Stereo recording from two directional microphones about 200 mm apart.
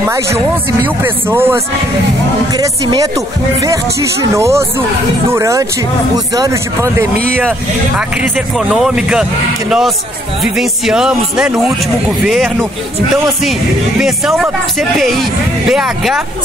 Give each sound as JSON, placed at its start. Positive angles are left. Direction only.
{"t": 0.8, "sound": "speech", "side_deg": -10}
{"t": 8.2, "sound": "speech", "side_deg": 0}